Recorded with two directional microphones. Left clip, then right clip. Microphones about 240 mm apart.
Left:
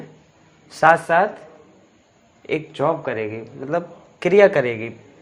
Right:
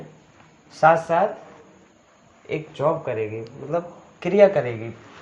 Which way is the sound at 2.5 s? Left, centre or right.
Left.